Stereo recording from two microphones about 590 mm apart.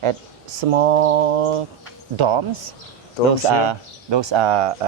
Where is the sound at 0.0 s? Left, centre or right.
Right.